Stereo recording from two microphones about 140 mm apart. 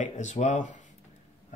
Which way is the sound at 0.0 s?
55° left (ahead or behind).